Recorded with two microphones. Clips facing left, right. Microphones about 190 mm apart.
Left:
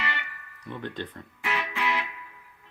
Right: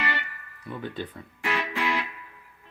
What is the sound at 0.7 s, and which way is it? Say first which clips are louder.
Speech: right 1 dB; 5° right (ahead or behind).